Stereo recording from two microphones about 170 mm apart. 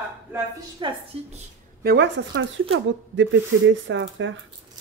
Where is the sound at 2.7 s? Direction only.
90° right.